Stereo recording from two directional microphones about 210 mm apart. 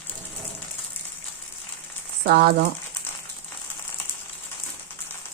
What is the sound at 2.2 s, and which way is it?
Speech, 45° right (ahead or behind).